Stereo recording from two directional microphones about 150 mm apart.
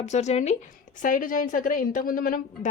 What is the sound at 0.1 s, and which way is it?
Speech, 50° left (ahead or behind).